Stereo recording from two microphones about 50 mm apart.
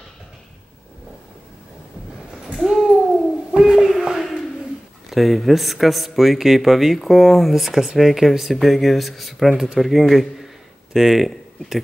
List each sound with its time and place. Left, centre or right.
2.4 s a sound: centre
5.1 s speech: centre
9.5 s a man's voice: centre